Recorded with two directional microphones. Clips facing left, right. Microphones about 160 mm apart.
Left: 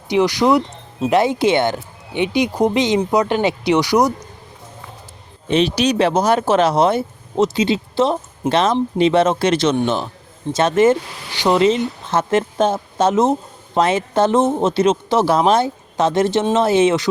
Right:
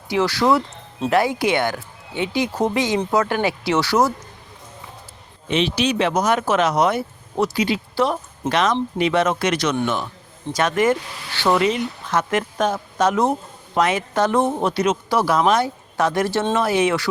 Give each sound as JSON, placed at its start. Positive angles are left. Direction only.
{"t": 0.1, "sound": "speech", "side_deg": 15}
{"t": 5.5, "sound": "speech", "side_deg": 40}